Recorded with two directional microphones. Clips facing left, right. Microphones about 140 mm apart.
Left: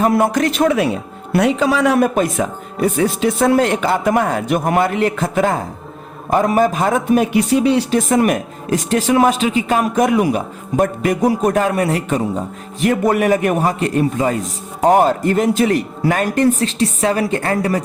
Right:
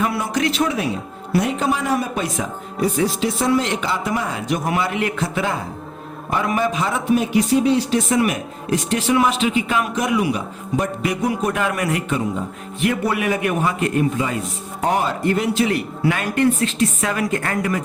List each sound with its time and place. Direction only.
0.0 s speech: 50° left (ahead or behind)
1.4 s a man's voice: 90° left
2.1 s speech: 55° left (ahead or behind)
7.5 s speech: 70° left (ahead or behind); by 17.8 s 35° left (ahead or behind)